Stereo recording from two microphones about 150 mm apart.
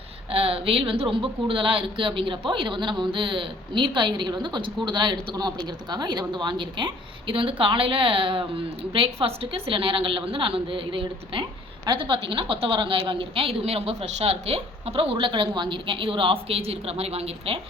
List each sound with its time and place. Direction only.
0.3 s speech: 40° right (ahead or behind)